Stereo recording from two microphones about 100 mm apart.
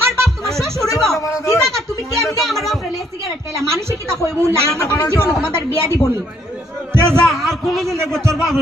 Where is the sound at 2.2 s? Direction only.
Centre (ahead or behind).